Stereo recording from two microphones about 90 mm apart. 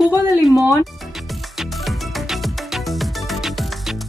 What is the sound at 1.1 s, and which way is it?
Music, centre (ahead or behind).